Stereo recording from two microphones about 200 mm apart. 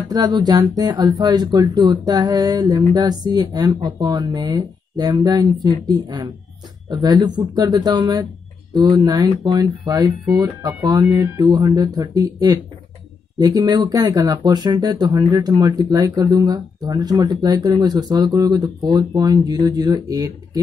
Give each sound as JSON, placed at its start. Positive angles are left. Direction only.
{"t": 0.1, "sound": "speech", "side_deg": -20}